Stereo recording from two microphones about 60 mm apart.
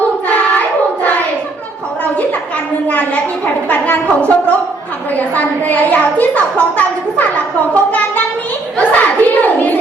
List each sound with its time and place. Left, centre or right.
2.8 s a woman's voice: left
8.8 s hands: left